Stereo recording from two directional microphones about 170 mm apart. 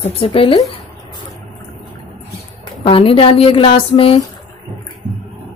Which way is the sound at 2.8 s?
30° left (ahead or behind).